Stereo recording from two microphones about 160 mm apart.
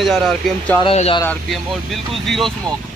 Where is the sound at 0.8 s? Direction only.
35° left (ahead or behind).